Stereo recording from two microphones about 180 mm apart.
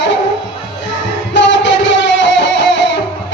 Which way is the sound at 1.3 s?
80° left.